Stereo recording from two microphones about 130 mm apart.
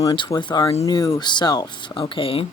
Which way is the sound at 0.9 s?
25° left (ahead or behind).